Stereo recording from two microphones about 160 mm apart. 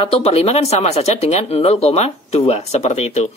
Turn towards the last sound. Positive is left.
turn(degrees=45)  # may be behind; listen again after turning